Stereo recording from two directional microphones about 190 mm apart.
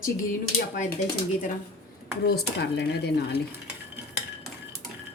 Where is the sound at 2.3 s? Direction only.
60° left (ahead or behind).